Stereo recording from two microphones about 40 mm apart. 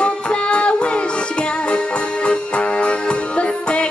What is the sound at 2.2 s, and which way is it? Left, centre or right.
Music, left.